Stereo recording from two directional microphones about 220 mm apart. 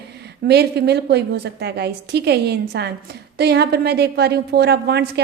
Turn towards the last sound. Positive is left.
turn(degrees=-50)  # may be behind; listen again after turning